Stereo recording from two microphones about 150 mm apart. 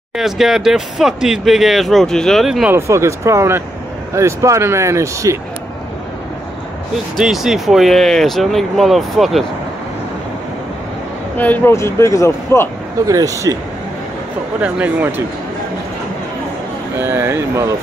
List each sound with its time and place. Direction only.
0.2 s speech: centre (ahead or behind)
2.7 s speech: 20° right (ahead or behind)
7.2 s speech: centre (ahead or behind)
11.3 s speech: 10° left (ahead or behind)
13.0 s speech: 20° right (ahead or behind)
14.6 s speech: 10° right (ahead or behind)
17.0 s speech: 15° right (ahead or behind)